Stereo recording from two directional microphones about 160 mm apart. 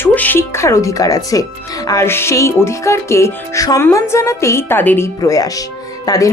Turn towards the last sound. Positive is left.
turn(degrees=20)  # may be behind; listen again after turning